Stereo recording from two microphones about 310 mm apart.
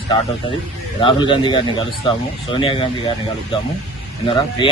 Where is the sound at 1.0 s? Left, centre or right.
Centre.